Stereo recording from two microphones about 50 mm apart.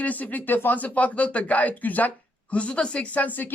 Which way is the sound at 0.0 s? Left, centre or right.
Left.